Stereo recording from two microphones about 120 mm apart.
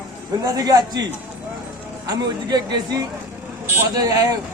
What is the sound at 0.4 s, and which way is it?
Speech, 30° right (ahead or behind).